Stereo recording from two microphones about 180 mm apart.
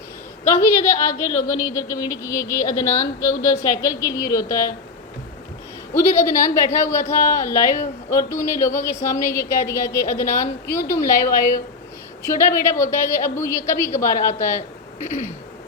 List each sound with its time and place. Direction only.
0.5 s speech: 15° left (ahead or behind)
6.0 s speech: 15° left (ahead or behind)
15.0 s a sound: 40° left (ahead or behind)